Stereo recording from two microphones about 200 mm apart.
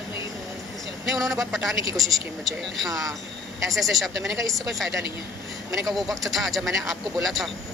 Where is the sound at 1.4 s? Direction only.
Centre (ahead or behind).